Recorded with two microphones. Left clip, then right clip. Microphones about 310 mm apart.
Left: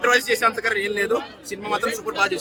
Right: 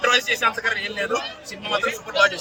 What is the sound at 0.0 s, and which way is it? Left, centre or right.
Speech, centre.